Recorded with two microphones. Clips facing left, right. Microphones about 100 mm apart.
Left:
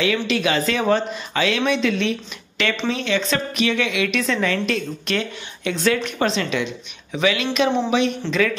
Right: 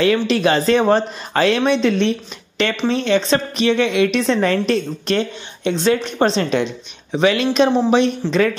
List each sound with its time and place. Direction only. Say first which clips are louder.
0.0 s a woman's voice: right 5 dB; 40° right (ahead or behind)